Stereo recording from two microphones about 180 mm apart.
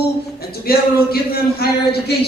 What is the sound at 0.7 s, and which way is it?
Speech, 55° left (ahead or behind).